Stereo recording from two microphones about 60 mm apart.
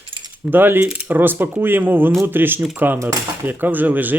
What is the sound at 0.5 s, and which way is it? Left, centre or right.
Speech, right.